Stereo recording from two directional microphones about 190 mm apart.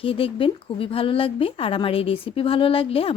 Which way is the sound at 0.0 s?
30° left (ahead or behind).